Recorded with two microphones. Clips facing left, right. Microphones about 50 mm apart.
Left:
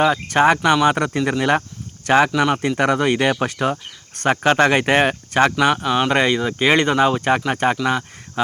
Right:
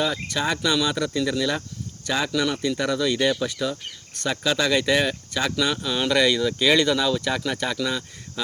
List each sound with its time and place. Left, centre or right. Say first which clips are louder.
0.0 s speech: left 10 dB; left
2.3 s speech: left 5 dB; left